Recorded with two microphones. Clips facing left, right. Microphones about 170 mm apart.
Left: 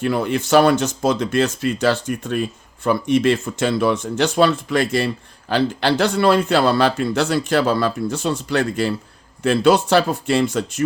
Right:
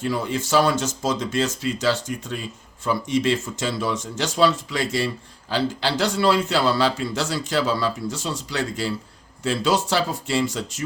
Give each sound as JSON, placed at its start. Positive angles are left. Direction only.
{"t": 0.0, "sound": "speech", "side_deg": 65}